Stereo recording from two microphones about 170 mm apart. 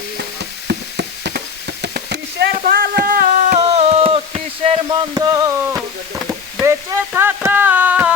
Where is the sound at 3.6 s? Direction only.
35° right (ahead or behind).